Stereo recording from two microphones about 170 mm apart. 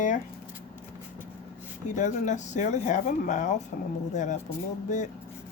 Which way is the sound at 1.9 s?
45° left (ahead or behind).